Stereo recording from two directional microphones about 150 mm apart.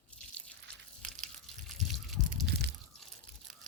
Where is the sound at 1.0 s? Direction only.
55° right (ahead or behind).